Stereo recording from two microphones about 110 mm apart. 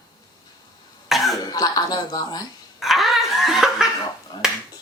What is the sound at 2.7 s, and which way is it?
Snicker, centre (ahead or behind).